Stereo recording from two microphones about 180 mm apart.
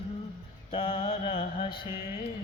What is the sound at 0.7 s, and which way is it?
Mantra, 30° left (ahead or behind).